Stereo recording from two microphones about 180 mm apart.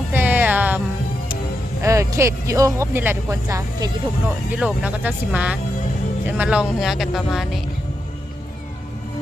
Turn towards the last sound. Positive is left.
turn(degrees=0)  # may be behind; listen again after turning